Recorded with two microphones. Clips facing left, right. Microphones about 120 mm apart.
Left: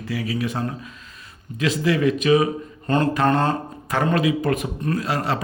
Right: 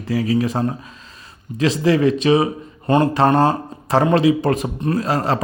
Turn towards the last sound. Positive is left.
turn(degrees=-40)  # may be behind; listen again after turning